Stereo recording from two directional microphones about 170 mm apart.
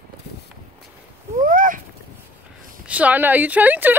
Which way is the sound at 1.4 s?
50° right (ahead or behind).